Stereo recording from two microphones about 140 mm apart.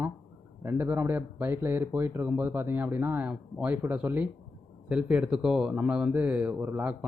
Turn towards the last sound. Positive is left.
turn(degrees=-15)  # may be behind; listen again after turning